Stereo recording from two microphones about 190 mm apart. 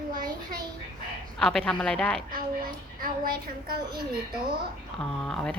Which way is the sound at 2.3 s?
50° right (ahead or behind).